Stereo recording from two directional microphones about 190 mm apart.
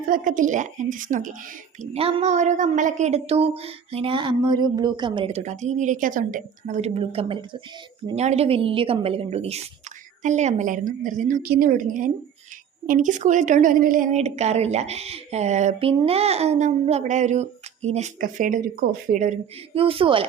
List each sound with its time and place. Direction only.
0.1 s a woman's voice: 45° right (ahead or behind)
1.8 s a woman's voice: 30° right (ahead or behind)